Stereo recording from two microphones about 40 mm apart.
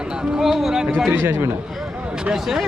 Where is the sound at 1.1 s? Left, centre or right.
Right.